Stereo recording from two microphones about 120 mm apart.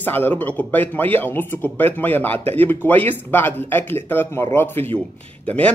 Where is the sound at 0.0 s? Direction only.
15° left (ahead or behind).